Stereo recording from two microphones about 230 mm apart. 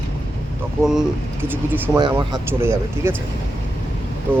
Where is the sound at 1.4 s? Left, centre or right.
Centre.